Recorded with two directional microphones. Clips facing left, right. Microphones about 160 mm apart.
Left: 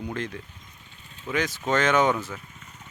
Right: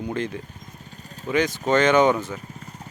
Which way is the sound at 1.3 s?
Centre (ahead or behind).